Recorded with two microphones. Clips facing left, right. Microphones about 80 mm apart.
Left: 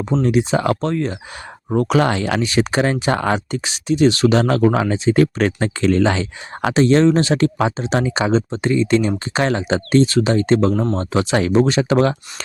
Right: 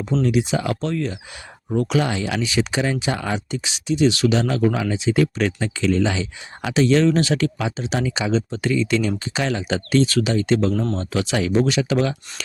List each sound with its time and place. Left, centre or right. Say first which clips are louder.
0.2 s speech: left 3 dB; left
1.7 s speech: left 4 dB; left